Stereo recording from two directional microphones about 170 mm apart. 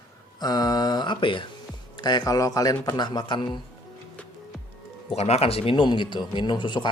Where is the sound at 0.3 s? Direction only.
25° left (ahead or behind).